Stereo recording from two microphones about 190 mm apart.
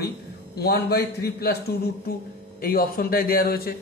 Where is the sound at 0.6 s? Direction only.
55° left (ahead or behind).